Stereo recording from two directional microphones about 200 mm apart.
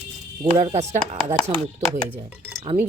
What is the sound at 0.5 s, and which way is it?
Speech, 30° right (ahead or behind).